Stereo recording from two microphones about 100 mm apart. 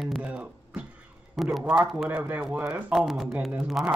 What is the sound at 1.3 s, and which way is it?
Speech, centre (ahead or behind).